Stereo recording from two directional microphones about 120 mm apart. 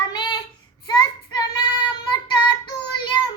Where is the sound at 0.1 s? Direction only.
35° left (ahead or behind).